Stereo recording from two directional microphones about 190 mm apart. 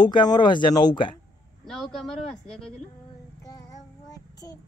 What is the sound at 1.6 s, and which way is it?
Speech, centre (ahead or behind).